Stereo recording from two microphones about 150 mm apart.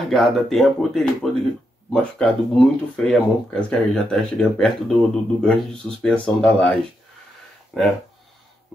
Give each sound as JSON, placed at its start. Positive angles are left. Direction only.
{"t": 0.1, "sound": "speech", "side_deg": 0}
{"t": 7.7, "sound": "speech", "side_deg": 0}